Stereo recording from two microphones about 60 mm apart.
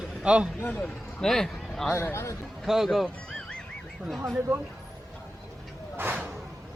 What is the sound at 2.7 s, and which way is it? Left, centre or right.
Speech, centre.